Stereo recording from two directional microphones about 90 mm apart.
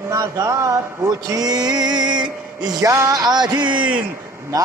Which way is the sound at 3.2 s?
50° right (ahead or behind).